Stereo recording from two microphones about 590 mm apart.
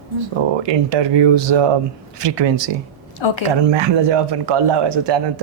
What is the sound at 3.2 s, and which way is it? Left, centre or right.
Speech, left.